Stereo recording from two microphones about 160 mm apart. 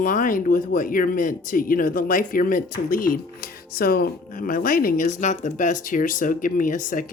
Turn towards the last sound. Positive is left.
turn(degrees=55)  # may be behind; listen again after turning